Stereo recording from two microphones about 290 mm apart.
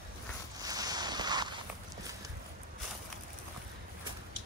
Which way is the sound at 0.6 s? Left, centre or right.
Centre.